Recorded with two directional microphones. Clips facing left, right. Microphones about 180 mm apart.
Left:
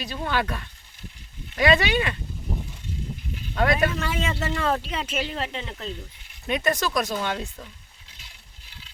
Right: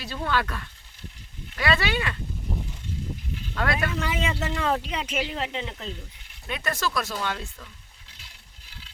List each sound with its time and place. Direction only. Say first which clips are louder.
0.0 s speech: left 1 dB; 15° left (ahead or behind)
3.5 s speech: left 5 dB; 20° left (ahead or behind)
3.9 s speech: even; 15° right (ahead or behind)
6.5 s speech: left 4 dB; 20° left (ahead or behind)